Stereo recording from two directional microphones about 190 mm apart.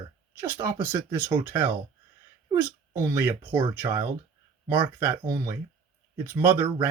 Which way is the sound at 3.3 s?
10° right (ahead or behind).